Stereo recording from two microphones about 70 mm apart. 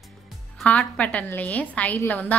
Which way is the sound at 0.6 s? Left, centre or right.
Centre.